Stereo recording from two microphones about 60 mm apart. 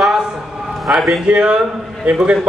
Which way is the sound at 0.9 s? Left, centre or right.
Centre.